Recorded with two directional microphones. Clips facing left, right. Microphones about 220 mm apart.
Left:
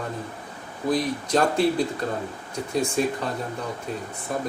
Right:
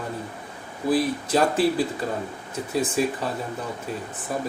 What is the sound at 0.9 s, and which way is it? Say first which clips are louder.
Speech: right 1 dB; 5° right (ahead or behind).